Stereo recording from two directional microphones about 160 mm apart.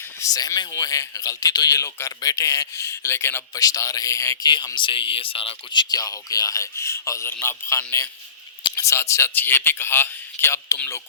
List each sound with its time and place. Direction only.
0.3 s a man's voice: 25° left (ahead or behind)